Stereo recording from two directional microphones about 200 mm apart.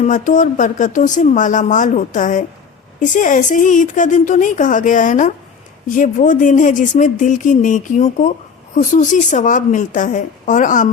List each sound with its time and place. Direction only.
0.0 s speech: 40° left (ahead or behind)